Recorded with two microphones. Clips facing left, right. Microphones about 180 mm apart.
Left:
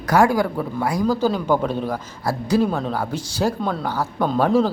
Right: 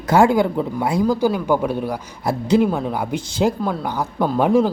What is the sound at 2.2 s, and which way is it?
Speech, 20° right (ahead or behind).